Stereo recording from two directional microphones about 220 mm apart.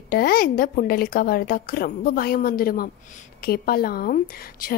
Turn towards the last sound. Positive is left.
turn(degrees=40)  # may be behind; listen again after turning